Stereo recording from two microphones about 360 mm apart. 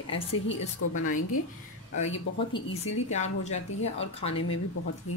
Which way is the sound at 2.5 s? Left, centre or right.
Centre.